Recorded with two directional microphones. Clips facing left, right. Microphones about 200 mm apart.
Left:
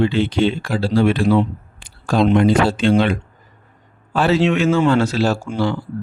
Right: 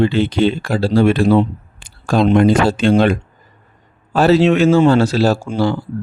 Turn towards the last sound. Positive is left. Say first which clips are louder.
# right 3 dB
turn(degrees=-35)  # may be behind; listen again after turning